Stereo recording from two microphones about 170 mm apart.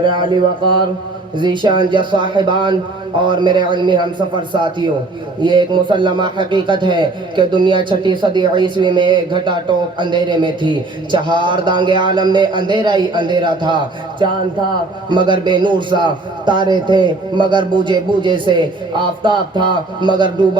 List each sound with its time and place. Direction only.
0.0 s speech: 30° right (ahead or behind)